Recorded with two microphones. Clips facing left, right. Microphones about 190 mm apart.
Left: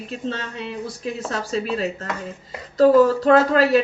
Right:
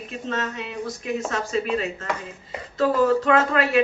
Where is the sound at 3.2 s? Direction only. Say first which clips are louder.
Left 5 dB; 35° left (ahead or behind).